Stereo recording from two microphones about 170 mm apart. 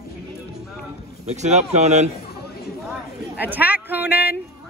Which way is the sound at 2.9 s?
10° right (ahead or behind).